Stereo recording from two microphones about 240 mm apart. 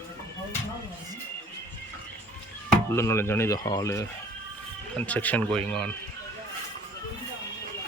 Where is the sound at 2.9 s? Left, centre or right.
Centre.